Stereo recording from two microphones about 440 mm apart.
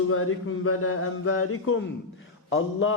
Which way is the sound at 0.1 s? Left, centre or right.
Left.